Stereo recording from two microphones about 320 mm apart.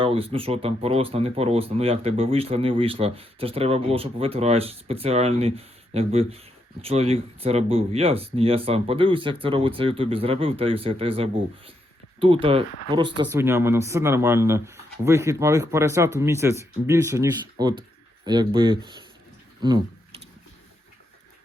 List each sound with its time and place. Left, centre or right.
0.0 s speech: centre